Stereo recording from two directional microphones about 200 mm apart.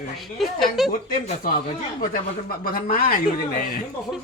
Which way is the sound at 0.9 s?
45° left (ahead or behind).